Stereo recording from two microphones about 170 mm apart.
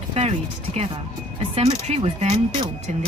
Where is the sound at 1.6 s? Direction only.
40° right (ahead or behind).